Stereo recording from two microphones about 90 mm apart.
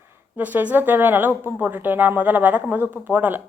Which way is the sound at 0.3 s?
20° right (ahead or behind).